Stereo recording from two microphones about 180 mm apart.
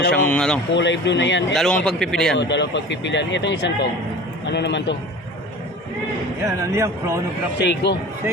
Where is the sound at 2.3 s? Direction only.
80° left.